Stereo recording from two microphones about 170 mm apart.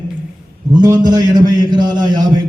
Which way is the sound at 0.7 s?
25° right (ahead or behind).